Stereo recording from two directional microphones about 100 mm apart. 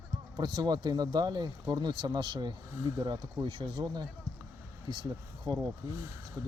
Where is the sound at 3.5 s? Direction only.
50° right (ahead or behind).